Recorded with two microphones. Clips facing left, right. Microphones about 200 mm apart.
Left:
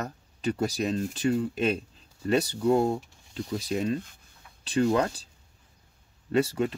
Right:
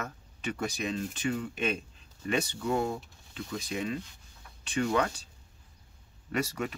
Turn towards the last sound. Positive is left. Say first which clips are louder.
# left 7 dB
turn(degrees=30)  # may be behind; listen again after turning